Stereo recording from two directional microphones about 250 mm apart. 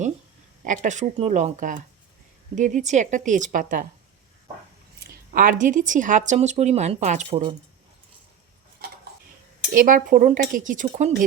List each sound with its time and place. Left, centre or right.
0.6 s speech: right
4.9 s speech: right
9.6 s speech: right